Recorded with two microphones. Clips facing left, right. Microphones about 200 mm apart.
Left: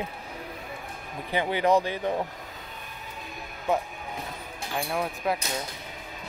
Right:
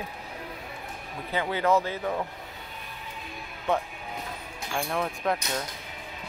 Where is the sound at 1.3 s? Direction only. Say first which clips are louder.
Left 2 dB; 15° left (ahead or behind).